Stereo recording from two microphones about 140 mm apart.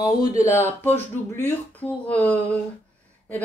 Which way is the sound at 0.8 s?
15° left (ahead or behind).